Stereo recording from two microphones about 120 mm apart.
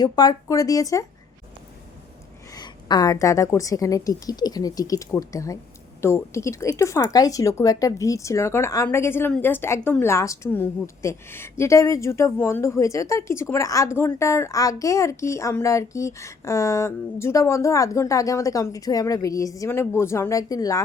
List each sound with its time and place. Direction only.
0.0 s a woman's voice: 35° left (ahead or behind)
2.6 s a woman's voice: 35° left (ahead or behind)